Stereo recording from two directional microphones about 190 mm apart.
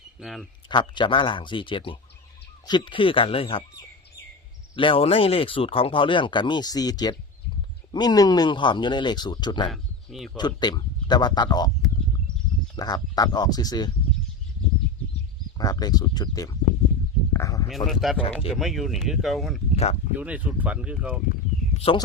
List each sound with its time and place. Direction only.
0.2 s speech: centre (ahead or behind)
0.7 s speech: 25° left (ahead or behind)
9.7 s a sound: centre (ahead or behind)
10.3 s speech: 20° left (ahead or behind)
12.7 s speech: 20° left (ahead or behind)
15.5 s speech: 20° left (ahead or behind)
17.3 s a sound: 20° left (ahead or behind)
17.7 s speech: centre (ahead or behind)
19.7 s speech: 35° left (ahead or behind)
20.1 s speech: 10° right (ahead or behind)
21.8 s speech: 30° left (ahead or behind)